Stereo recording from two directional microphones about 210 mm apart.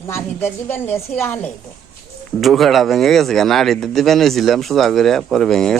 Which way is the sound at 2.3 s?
Centre (ahead or behind).